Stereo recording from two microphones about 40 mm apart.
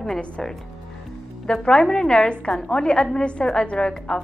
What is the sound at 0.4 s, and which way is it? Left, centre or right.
A woman's voice, centre.